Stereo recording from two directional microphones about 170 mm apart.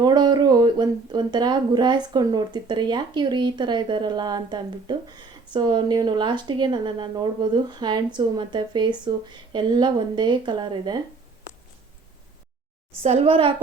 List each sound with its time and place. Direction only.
0.0 s speech: 25° right (ahead or behind)
13.0 s a woman's voice: 35° right (ahead or behind)